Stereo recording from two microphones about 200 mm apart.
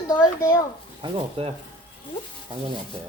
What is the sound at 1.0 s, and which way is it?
Speech, 25° right (ahead or behind).